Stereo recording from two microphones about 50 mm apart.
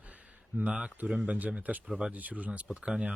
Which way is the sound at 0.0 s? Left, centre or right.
Right.